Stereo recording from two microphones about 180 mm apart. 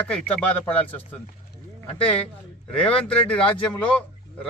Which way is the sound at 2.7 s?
5° left (ahead or behind).